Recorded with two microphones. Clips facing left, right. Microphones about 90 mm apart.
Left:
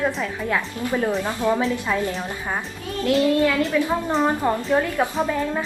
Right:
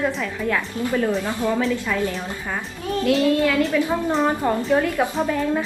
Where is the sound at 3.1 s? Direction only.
Centre (ahead or behind).